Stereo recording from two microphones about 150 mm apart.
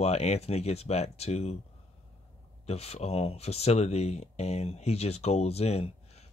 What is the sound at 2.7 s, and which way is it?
Speech, 45° left (ahead or behind).